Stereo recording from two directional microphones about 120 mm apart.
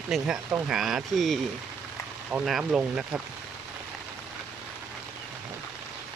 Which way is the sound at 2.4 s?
Centre (ahead or behind).